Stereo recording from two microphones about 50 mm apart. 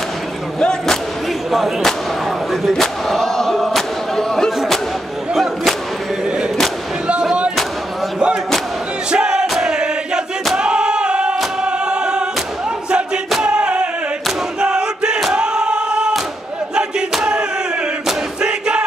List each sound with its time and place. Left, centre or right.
0.6 s speech: centre
2.7 s a sound: centre
5.3 s music: centre
9.1 s music: centre
9.6 s chant: centre
10.6 s music: centre
13.4 s a sound: right
14.6 s battle cry: centre
15.3 s choir: centre
17.2 s a sound: centre
18.0 s battle cry: centre